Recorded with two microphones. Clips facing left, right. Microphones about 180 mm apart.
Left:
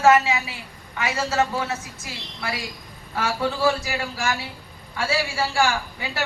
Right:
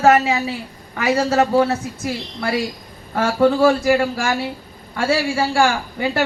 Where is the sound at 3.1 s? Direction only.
50° right (ahead or behind).